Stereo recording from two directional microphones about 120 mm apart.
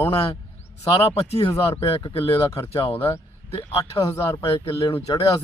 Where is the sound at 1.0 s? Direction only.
55° left (ahead or behind).